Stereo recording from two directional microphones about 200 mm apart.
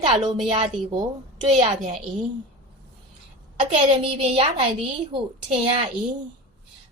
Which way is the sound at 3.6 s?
30° right (ahead or behind).